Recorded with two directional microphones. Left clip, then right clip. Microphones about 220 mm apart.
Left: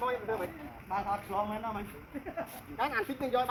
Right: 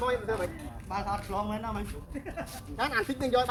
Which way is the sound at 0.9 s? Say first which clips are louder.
Even; 10° right (ahead or behind).